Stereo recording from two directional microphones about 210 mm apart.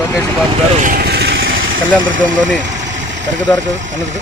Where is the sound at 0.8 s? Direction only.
45° right (ahead or behind).